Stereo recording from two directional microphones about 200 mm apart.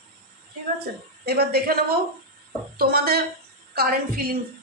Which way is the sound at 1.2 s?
50° right (ahead or behind).